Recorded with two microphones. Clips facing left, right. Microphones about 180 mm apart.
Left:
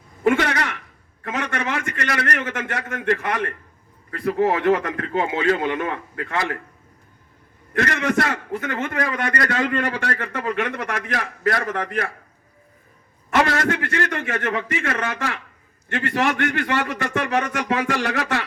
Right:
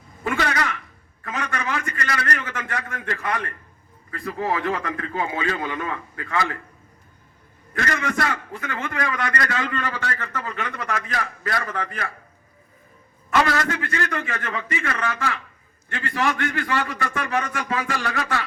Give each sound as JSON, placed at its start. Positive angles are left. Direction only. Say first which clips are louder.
{"t": 0.3, "sound": "a sound", "louder": "left 5 dB", "side_deg": 70}
{"t": 1.2, "sound": "a man's voice", "louder": "left 3 dB", "side_deg": 70}
{"t": 7.9, "sound": "a man's voice", "louder": "left 7 dB", "side_deg": 65}
{"t": 8.8, "sound": "a man's voice", "louder": "even", "side_deg": 30}
{"t": 9.7, "sound": "a man's voice", "louder": "left 4 dB", "side_deg": 60}
{"t": 13.3, "sound": "a man's voice", "louder": "left 1 dB", "side_deg": 50}
{"t": 14.4, "sound": "a man's voice", "louder": "left 4 dB", "side_deg": 70}